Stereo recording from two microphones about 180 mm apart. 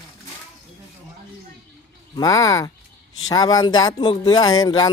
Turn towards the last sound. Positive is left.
turn(degrees=20)  # may be behind; listen again after turning